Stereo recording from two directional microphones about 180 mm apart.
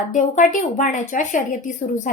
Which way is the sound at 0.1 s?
45° left (ahead or behind).